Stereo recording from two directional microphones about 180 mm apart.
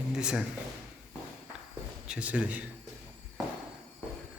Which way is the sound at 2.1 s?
5° right (ahead or behind).